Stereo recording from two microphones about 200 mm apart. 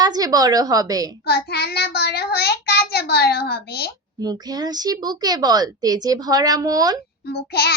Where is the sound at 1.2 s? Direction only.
55° left (ahead or behind).